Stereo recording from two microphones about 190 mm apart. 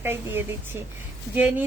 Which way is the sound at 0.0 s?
10° right (ahead or behind).